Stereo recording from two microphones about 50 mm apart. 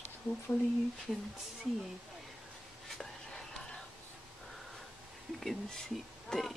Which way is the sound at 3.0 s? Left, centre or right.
Centre.